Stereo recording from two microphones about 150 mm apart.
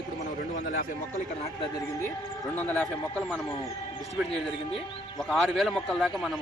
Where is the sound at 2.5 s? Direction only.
10° left (ahead or behind).